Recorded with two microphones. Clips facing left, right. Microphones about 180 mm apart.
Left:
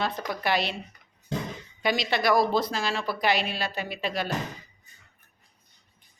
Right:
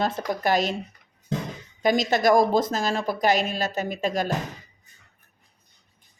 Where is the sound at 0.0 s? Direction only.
45° right (ahead or behind).